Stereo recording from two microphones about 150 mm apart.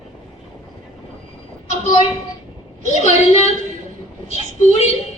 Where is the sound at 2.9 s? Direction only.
50° left (ahead or behind).